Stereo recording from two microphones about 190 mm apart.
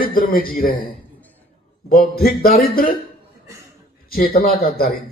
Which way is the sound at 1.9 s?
50° left (ahead or behind).